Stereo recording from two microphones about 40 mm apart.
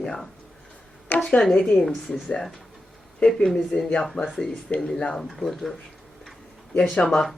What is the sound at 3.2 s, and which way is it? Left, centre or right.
Speech, left.